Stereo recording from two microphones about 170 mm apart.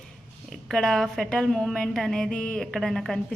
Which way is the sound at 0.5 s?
Centre (ahead or behind).